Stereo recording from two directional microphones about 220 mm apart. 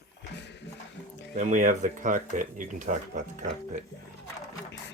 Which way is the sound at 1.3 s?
35° right (ahead or behind).